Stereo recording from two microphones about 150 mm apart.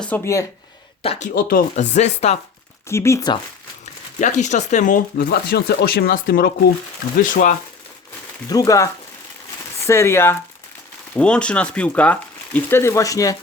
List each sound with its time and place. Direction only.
0.1 s speech: 10° left (ahead or behind)
1.0 s speech: 40° left (ahead or behind)
1.3 s speech: 75° left (ahead or behind)
1.7 s speech: 50° left (ahead or behind)
2.9 s speech: 20° left (ahead or behind)
4.2 s speech: 50° left (ahead or behind); by 6.5 s 75° left (ahead or behind)
7.2 s speech: 65° left (ahead or behind)
8.4 s speech: 25° left (ahead or behind)
11.1 s speech: 5° left (ahead or behind); by 13.3 s 20° left (ahead or behind)